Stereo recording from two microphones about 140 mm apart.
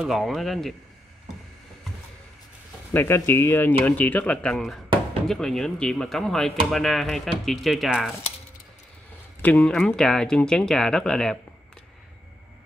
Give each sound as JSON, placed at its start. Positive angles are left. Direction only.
{"t": 0.0, "sound": "speech", "side_deg": 0}
{"t": 2.9, "sound": "speech", "side_deg": 15}
{"t": 9.4, "sound": "speech", "side_deg": 10}